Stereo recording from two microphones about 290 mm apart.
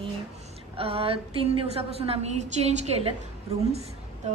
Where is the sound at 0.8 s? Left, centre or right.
Centre.